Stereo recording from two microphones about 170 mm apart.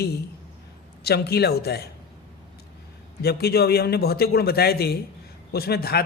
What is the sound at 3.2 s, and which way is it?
A man's voice, 65° left (ahead or behind).